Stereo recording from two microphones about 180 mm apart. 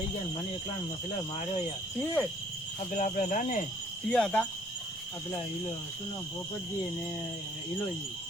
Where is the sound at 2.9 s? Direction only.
45° left (ahead or behind).